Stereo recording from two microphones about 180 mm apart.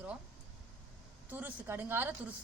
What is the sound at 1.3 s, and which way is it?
Speech, 10° right (ahead or behind).